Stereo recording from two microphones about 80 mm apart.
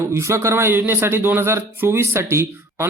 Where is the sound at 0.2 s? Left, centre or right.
Right.